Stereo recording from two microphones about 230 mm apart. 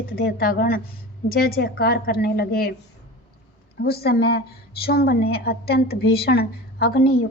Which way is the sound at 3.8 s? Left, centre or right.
Left.